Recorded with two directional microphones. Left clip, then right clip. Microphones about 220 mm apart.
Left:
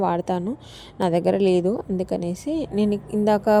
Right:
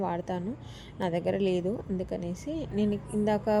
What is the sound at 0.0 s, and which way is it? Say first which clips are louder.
A woman's voice: left 9 dB; 40° left (ahead or behind).